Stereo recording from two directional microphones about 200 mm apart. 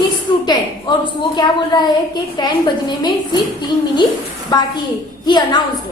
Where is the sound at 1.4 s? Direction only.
20° left (ahead or behind).